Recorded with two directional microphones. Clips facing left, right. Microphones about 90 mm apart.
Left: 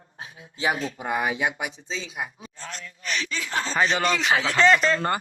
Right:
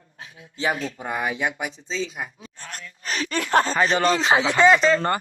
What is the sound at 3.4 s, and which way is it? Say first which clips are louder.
Speech: right 9 dB; 55° right (ahead or behind).